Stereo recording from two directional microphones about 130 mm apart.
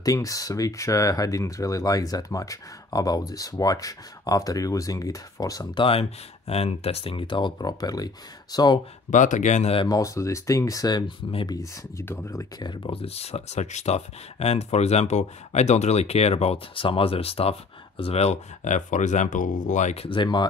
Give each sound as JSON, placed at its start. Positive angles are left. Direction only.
{"t": 0.0, "sound": "speech", "side_deg": 25}
{"t": 5.9, "sound": "speech", "side_deg": 50}
{"t": 9.1, "sound": "speech", "side_deg": 75}
{"t": 9.8, "sound": "speech", "side_deg": 25}
{"t": 12.0, "sound": "speech", "side_deg": 20}
{"t": 20.1, "sound": "speech", "side_deg": 35}